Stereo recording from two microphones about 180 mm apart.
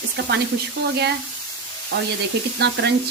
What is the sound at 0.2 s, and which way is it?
Frying, 70° right (ahead or behind).